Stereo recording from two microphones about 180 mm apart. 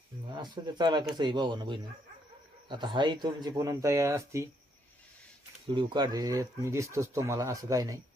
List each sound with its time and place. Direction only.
0.3 s speech: 25° right (ahead or behind)
5.6 s speech: 25° right (ahead or behind)